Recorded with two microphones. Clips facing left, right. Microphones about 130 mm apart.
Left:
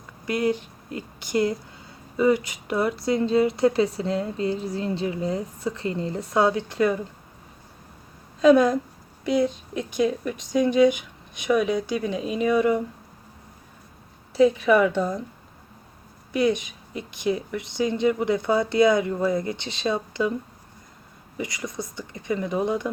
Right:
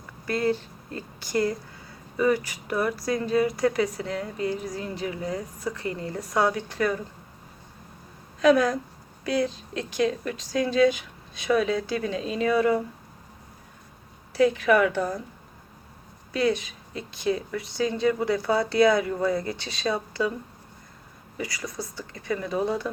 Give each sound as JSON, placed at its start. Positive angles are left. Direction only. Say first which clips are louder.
{"t": 0.3, "sound": "speech", "louder": "left 1 dB", "side_deg": 15}
{"t": 8.4, "sound": "speech", "louder": "left 3 dB", "side_deg": 25}
{"t": 14.3, "sound": "speech", "louder": "left 2 dB", "side_deg": 25}
{"t": 16.3, "sound": "speech", "louder": "left 2 dB", "side_deg": 20}
{"t": 21.3, "sound": "speech", "louder": "left 2 dB", "side_deg": 20}